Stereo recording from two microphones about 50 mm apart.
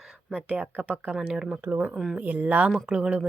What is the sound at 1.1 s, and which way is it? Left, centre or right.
Speech, centre.